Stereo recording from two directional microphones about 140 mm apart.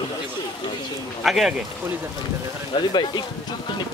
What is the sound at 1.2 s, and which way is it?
Speech, centre (ahead or behind).